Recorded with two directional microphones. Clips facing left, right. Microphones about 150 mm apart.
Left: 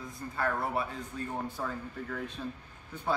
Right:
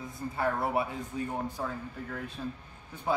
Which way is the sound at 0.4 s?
20° right (ahead or behind).